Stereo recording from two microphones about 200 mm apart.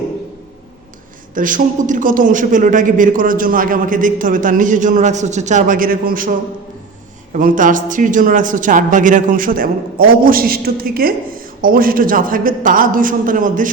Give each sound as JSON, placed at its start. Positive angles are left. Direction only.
{"t": 1.4, "sound": "a man's voice", "side_deg": -40}
{"t": 7.3, "sound": "a man's voice", "side_deg": -40}